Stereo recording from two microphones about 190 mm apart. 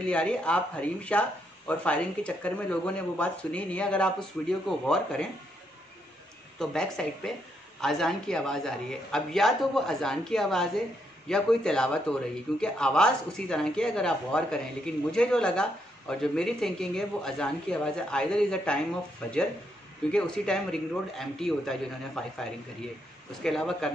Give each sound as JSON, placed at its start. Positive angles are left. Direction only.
{"t": 0.0, "sound": "a man's voice", "side_deg": 5}
{"t": 6.6, "sound": "a man's voice", "side_deg": 5}